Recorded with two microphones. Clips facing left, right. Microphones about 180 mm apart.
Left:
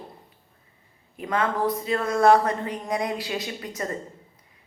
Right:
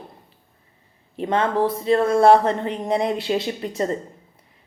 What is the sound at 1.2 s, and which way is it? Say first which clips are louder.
A woman's voice: right 5 dB; 25° right (ahead or behind).